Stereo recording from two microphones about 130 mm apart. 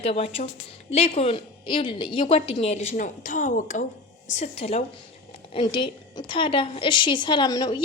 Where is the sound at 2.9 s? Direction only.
90° left.